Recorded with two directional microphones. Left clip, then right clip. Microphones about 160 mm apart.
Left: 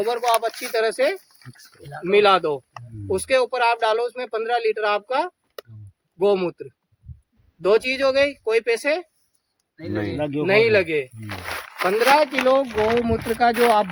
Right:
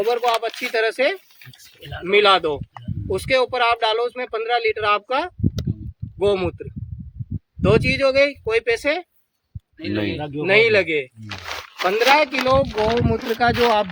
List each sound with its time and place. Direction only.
0.0 s speech: 5° right (ahead or behind)
7.7 s speech: centre (ahead or behind)
9.8 s speech: 90° right
10.2 s speech: 90° left
10.4 s speech: centre (ahead or behind)